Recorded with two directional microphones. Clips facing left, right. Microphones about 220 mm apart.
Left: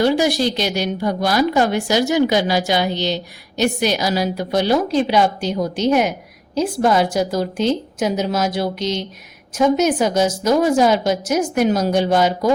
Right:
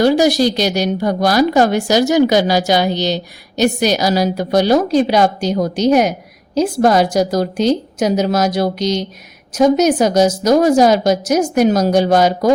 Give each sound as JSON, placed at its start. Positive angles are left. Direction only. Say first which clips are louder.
{"t": 0.0, "sound": "a woman's voice", "louder": "right 4 dB", "side_deg": -40}